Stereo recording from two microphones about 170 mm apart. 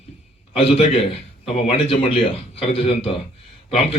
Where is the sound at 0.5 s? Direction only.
35° left (ahead or behind).